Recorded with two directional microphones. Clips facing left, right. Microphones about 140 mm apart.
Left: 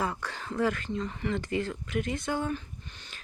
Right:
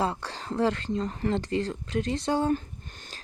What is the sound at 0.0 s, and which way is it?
Speech, 30° right (ahead or behind).